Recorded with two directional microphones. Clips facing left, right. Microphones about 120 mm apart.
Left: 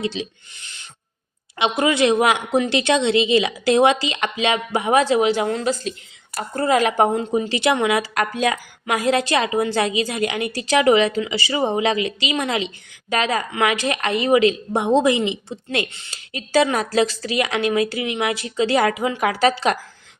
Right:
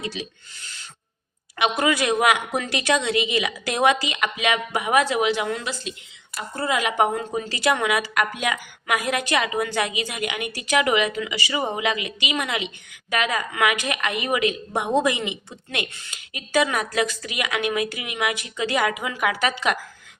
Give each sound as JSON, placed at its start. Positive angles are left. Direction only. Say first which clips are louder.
{"t": 0.0, "sound": "a woman's voice", "louder": "left 6 dB", "side_deg": 25}
{"t": 6.3, "sound": "a woman's voice", "louder": "left 6 dB", "side_deg": 45}